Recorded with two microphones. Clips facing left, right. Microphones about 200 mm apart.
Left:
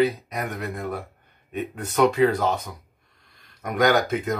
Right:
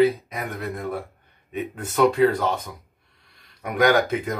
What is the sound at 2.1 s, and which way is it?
Speech, 5° left (ahead or behind).